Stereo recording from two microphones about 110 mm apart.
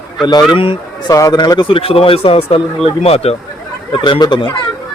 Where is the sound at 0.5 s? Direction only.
55° left (ahead or behind).